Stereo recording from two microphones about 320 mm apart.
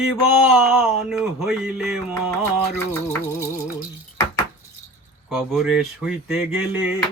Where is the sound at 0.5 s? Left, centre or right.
Centre.